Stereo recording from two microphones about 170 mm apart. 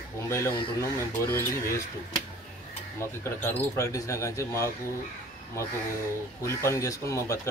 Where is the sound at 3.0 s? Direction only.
15° left (ahead or behind).